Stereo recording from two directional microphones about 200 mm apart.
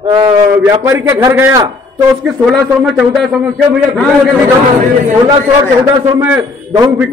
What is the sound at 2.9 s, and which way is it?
A man's voice, centre (ahead or behind).